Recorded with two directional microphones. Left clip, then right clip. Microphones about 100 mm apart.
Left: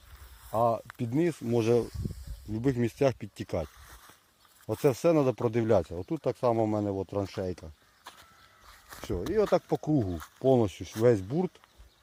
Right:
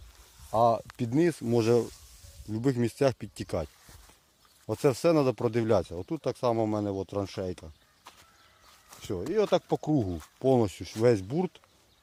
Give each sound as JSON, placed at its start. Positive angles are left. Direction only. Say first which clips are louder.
{"t": 0.5, "sound": "speech", "louder": "right 3 dB", "side_deg": -45}
{"t": 1.6, "sound": "speech", "louder": "right 1 dB", "side_deg": -35}
{"t": 2.5, "sound": "speech", "louder": "right 1 dB", "side_deg": -20}
{"t": 9.0, "sound": "a sound", "louder": "even", "side_deg": 0}
{"t": 9.3, "sound": "speech", "louder": "even", "side_deg": -5}